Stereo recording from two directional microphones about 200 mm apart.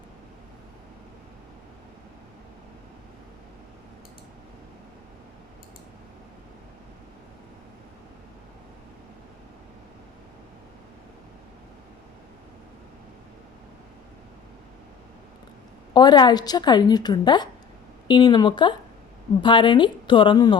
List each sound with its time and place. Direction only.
15.9 s a woman's voice: 20° left (ahead or behind)